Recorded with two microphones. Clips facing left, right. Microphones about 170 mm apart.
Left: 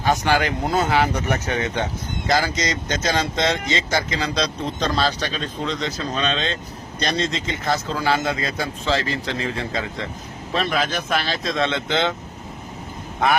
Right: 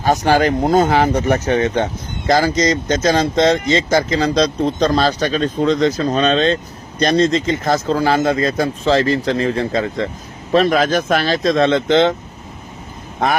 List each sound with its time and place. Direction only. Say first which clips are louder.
0.0 s speech: right 6 dB; 45° right (ahead or behind)